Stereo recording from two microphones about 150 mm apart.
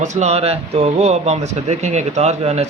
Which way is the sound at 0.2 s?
45° right (ahead or behind).